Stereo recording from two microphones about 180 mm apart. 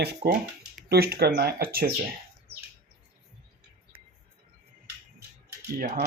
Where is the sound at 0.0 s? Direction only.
65° right (ahead or behind).